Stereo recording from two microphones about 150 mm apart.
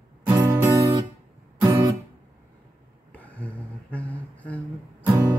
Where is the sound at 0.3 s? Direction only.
15° right (ahead or behind).